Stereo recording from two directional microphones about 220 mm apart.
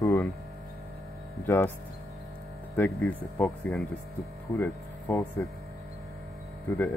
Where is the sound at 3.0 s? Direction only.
10° left (ahead or behind).